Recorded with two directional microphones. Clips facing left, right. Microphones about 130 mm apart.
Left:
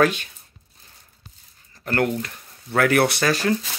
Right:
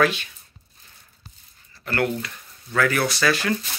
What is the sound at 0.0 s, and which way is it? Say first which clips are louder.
Speech: left 2 dB; 45° left (ahead or behind).